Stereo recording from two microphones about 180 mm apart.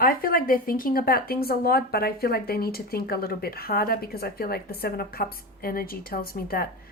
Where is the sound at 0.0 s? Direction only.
55° left (ahead or behind).